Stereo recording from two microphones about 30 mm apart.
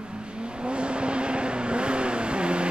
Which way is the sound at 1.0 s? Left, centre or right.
Right.